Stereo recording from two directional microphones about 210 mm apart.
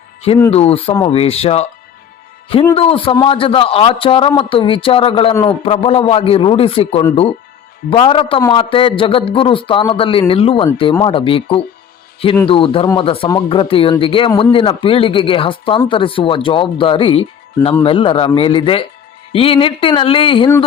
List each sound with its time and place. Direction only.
0.5 s a man's voice: 30° left (ahead or behind)
2.7 s a man's voice: 25° left (ahead or behind)